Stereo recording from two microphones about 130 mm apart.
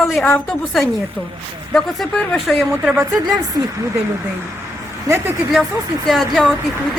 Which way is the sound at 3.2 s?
30° right (ahead or behind).